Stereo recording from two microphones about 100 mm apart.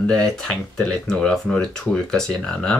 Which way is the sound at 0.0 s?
5° left (ahead or behind).